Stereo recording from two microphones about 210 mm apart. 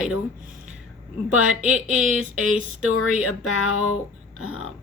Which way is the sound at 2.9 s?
90° left.